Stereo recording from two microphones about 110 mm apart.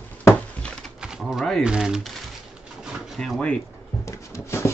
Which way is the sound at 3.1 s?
Centre (ahead or behind).